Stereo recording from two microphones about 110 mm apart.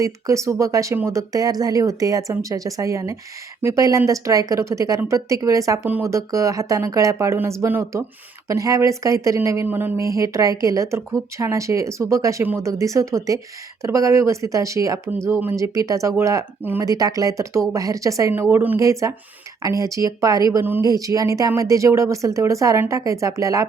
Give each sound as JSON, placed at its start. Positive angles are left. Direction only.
{"t": 0.0, "sound": "speech", "side_deg": -30}
{"t": 18.8, "sound": "speech", "side_deg": -30}